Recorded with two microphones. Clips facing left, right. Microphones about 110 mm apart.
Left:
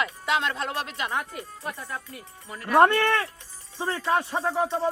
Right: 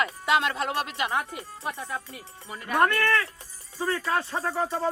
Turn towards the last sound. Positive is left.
turn(degrees=15)  # may be behind; listen again after turning